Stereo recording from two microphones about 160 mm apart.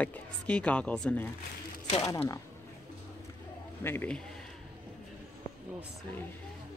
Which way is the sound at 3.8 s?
10° left (ahead or behind).